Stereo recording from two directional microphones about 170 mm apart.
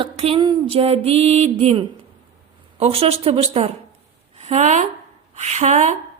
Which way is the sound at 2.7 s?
35° right (ahead or behind).